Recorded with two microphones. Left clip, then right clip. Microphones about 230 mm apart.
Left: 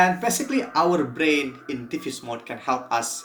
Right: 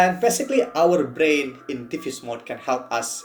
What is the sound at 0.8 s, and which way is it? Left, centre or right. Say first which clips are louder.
Speech: even; centre.